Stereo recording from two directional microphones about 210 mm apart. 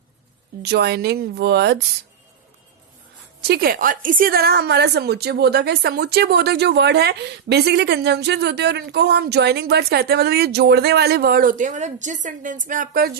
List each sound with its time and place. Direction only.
0.6 s a woman's voice: 50° right (ahead or behind)
3.4 s a woman's voice: 45° right (ahead or behind)